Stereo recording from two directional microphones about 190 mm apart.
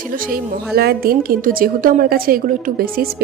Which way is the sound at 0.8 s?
55° right (ahead or behind).